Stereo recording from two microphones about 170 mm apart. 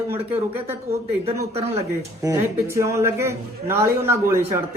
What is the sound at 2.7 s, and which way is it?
A man's voice, 15° right (ahead or behind).